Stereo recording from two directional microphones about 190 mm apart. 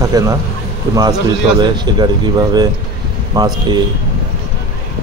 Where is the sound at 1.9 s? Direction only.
20° right (ahead or behind).